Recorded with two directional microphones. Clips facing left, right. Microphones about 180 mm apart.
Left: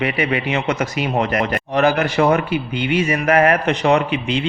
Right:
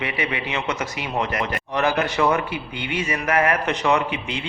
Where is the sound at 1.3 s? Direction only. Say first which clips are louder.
Left 6 dB; 60° left (ahead or behind).